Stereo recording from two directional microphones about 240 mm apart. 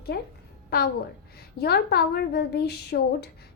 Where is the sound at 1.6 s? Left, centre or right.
Left.